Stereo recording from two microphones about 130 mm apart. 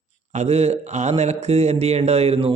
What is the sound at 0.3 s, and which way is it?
Speech, 55° right (ahead or behind).